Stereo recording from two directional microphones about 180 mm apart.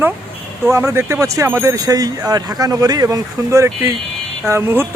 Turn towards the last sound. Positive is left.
turn(degrees=-15)  # may be behind; listen again after turning